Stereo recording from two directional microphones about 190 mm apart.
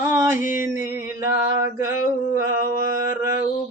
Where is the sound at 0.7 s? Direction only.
15° right (ahead or behind).